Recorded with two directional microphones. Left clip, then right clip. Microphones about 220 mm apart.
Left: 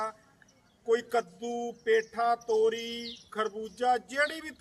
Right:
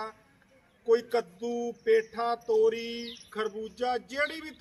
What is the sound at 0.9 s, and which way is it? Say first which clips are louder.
Mantra: right 2 dB; 5° right (ahead or behind).